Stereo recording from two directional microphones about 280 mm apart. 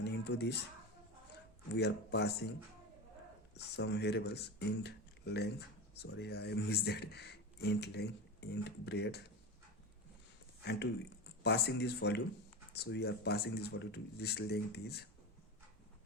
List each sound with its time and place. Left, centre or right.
0.0 s a sound: left
1.7 s speech: left
3.6 s speech: left
10.6 s speech: left